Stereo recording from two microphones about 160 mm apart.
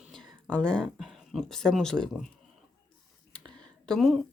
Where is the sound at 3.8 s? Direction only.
Centre (ahead or behind).